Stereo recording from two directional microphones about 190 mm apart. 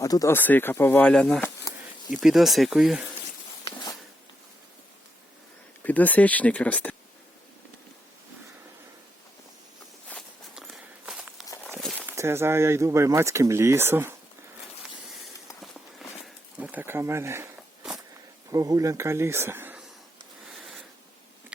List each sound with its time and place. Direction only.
0.0 s speech: 15° left (ahead or behind)
1.7 s insect: 20° left (ahead or behind)
2.0 s speech: centre (ahead or behind)
3.7 s a sound: 20° left (ahead or behind)
5.8 s speech: 10° left (ahead or behind)
10.1 s walk: centre (ahead or behind)
11.8 s speech: 5° right (ahead or behind)
16.2 s a sound: 5° right (ahead or behind)
18.5 s speech: 15° right (ahead or behind)